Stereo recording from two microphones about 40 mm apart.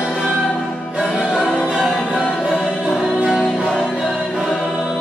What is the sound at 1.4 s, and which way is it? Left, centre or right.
Music, centre.